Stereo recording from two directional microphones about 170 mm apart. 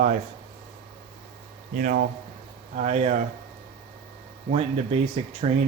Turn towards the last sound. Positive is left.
turn(degrees=-40)  # may be behind; listen again after turning